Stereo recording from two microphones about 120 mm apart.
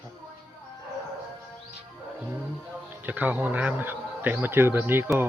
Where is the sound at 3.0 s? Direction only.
15° right (ahead or behind).